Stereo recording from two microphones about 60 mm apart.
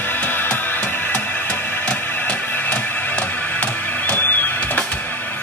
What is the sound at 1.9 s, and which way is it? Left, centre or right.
Music, left.